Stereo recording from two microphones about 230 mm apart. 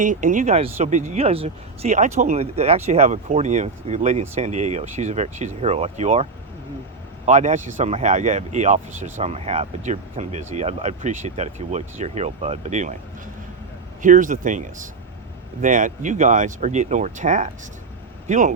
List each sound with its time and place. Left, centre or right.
0.0 s speech: right
7.3 s speech: right
14.0 s speech: right